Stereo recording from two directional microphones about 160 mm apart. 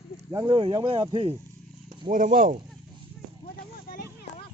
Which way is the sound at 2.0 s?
50° right (ahead or behind).